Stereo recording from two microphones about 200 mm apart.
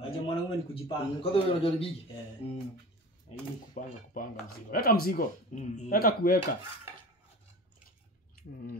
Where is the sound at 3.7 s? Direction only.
45° left (ahead or behind).